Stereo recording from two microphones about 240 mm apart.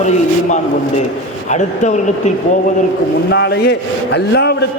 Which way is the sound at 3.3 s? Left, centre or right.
Left.